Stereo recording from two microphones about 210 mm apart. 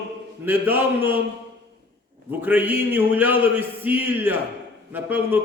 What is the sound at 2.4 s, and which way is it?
A man's voice, 10° right (ahead or behind).